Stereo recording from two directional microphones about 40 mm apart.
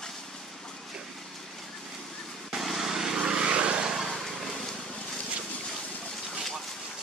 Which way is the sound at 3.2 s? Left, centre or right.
Right.